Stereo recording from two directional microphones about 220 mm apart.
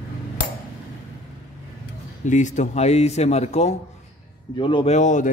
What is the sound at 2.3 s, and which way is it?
A man's voice, 35° left (ahead or behind).